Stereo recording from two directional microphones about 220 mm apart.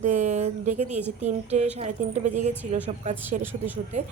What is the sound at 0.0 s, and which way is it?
A woman's voice, 35° right (ahead or behind).